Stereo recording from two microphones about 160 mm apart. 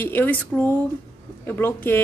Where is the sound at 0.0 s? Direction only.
10° left (ahead or behind).